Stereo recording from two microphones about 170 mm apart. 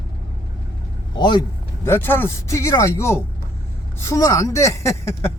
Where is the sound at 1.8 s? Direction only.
10° left (ahead or behind).